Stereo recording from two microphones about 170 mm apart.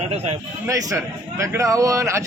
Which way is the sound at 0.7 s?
20° right (ahead or behind).